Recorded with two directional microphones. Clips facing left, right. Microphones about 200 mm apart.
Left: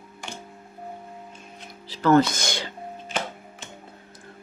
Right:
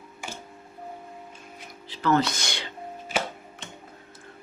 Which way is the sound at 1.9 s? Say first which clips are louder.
Left 5 dB; 45° left (ahead or behind).